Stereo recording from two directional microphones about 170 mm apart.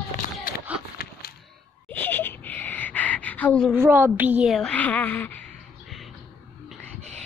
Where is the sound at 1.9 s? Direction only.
10° left (ahead or behind).